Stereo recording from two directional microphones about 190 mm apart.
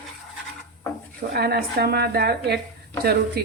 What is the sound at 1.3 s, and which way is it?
A woman's voice, 55° right (ahead or behind).